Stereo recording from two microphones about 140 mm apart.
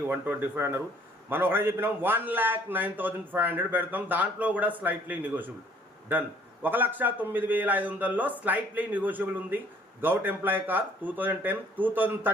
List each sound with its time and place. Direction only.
0.1 s a man's voice: 15° right (ahead or behind)